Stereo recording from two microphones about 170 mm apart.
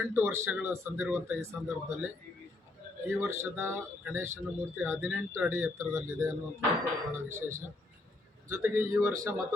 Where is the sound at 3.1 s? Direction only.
15° right (ahead or behind).